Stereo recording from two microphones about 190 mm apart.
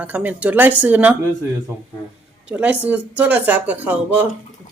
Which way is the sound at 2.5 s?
5° right (ahead or behind).